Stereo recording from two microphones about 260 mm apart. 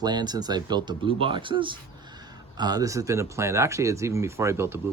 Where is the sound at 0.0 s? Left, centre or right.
Centre.